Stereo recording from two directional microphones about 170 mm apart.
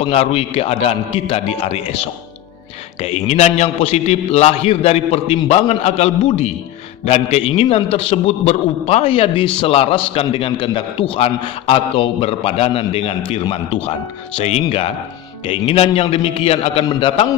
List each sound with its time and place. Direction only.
0.0 s a man's voice: 35° left (ahead or behind)